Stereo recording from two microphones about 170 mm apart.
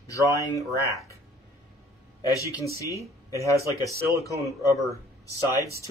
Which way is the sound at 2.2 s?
20° left (ahead or behind).